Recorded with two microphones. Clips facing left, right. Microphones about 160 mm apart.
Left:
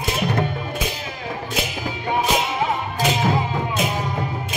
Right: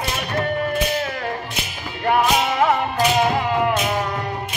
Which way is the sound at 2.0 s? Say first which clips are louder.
Right 4 dB; 70° right (ahead or behind).